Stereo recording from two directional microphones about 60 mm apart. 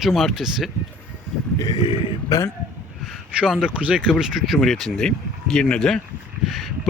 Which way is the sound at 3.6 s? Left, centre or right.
Centre.